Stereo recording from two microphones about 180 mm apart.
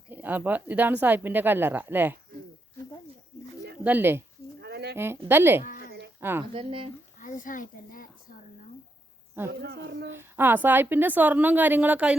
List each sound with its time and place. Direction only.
0.1 s speech: 10° right (ahead or behind)
3.8 s speech: 10° right (ahead or behind)
4.6 s bird: 65° right (ahead or behind)
4.9 s speech: 15° right (ahead or behind)
5.6 s a sound: 50° left (ahead or behind)
6.1 s a woman's voice: 10° right (ahead or behind)
6.5 s speech: 30° right (ahead or behind)
7.2 s a sound: 45° left (ahead or behind)
9.5 s speech: 65° right (ahead or behind)
10.1 s speech: 10° right (ahead or behind)